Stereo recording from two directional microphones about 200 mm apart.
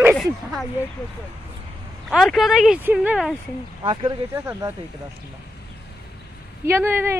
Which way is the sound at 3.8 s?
25° right (ahead or behind).